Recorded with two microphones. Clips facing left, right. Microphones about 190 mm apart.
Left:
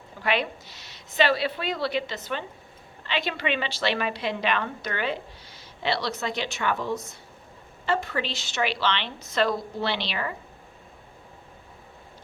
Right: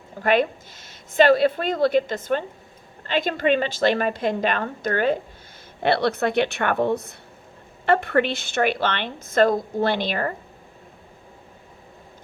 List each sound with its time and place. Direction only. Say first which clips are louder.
0.2 s a woman's voice: right 7 dB; 50° right (ahead or behind)
5.8 s a woman's voice: right 7 dB; 55° right (ahead or behind)